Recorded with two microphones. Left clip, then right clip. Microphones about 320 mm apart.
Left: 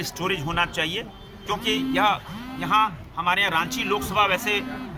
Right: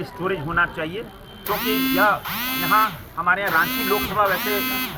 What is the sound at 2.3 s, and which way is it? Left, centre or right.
Speech, right.